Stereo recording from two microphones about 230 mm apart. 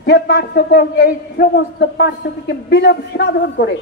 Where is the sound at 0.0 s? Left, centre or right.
Left.